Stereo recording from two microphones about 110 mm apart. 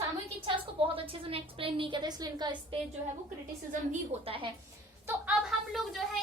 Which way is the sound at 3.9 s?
60° right (ahead or behind).